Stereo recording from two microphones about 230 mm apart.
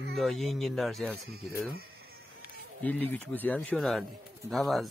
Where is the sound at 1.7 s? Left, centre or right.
Right.